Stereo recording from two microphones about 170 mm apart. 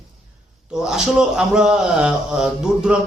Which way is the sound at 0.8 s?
5° right (ahead or behind).